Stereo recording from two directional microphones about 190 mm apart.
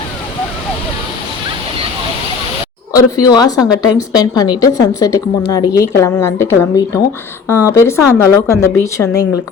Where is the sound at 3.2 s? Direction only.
20° left (ahead or behind).